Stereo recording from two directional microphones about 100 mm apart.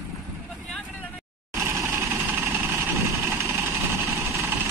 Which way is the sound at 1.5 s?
25° right (ahead or behind).